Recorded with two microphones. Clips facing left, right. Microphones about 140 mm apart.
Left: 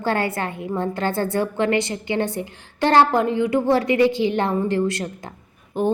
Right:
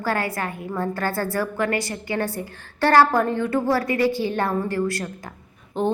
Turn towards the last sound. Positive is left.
turn(degrees=10)  # may be behind; listen again after turning